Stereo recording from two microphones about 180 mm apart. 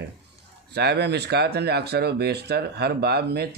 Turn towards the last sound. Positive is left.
turn(degrees=-65)  # may be behind; listen again after turning